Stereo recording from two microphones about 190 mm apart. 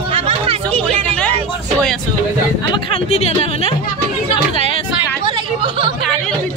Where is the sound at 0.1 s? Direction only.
30° right (ahead or behind).